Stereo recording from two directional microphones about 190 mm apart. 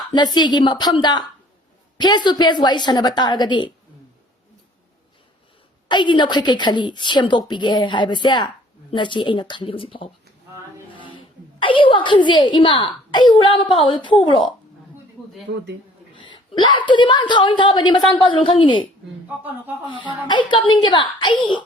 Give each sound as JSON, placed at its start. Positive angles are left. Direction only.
{"t": 0.1, "sound": "a woman's voice", "side_deg": 20}
{"t": 5.9, "sound": "a woman's voice", "side_deg": 25}
{"t": 11.6, "sound": "a woman's voice", "side_deg": 25}
{"t": 15.5, "sound": "speech", "side_deg": -40}
{"t": 16.1, "sound": "a woman's voice", "side_deg": 25}
{"t": 19.9, "sound": "a woman's voice", "side_deg": 25}